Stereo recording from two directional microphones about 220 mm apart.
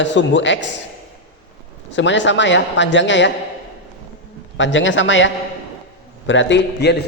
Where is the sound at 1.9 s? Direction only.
55° left (ahead or behind).